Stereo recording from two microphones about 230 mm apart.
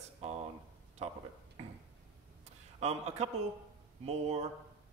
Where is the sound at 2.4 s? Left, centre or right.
Right.